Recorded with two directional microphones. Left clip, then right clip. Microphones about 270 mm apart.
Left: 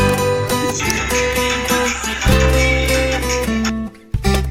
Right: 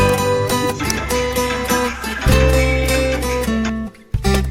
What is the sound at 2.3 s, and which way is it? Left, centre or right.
Music, centre.